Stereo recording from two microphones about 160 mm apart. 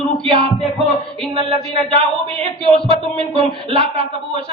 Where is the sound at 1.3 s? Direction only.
35° right (ahead or behind).